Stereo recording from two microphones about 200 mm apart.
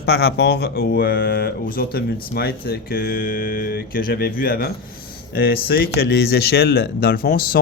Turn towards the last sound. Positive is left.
turn(degrees=50)  # may be behind; listen again after turning